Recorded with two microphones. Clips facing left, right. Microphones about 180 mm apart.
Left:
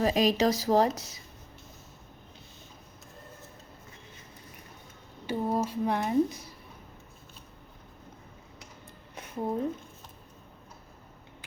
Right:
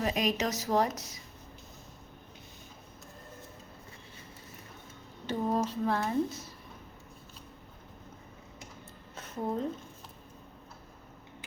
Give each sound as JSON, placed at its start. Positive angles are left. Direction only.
{"t": 0.0, "sound": "a woman's voice", "side_deg": 30}
{"t": 5.2, "sound": "a woman's voice", "side_deg": 10}
{"t": 9.1, "sound": "a sound", "side_deg": 10}